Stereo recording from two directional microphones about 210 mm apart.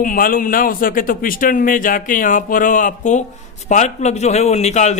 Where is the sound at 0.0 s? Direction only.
40° left (ahead or behind).